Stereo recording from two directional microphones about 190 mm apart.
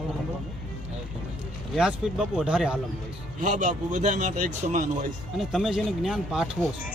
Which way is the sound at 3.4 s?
40° right (ahead or behind).